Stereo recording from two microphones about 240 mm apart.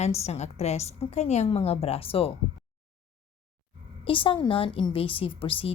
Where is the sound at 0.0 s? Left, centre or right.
Left.